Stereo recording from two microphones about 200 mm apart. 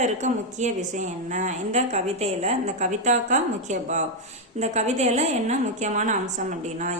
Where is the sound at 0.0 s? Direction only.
35° right (ahead or behind).